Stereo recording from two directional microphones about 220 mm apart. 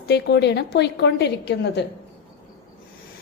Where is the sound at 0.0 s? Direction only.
50° left (ahead or behind).